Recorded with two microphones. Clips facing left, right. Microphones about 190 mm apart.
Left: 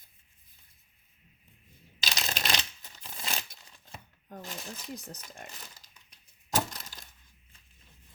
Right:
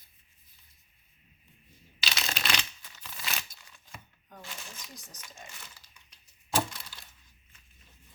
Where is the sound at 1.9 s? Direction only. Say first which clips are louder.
Even; 45° left (ahead or behind).